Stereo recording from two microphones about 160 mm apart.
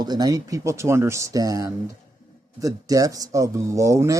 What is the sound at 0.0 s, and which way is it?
Speech, 25° right (ahead or behind).